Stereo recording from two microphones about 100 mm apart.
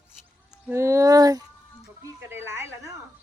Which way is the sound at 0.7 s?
30° right (ahead or behind).